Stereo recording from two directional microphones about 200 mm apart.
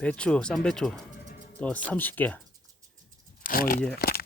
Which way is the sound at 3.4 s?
45° left (ahead or behind).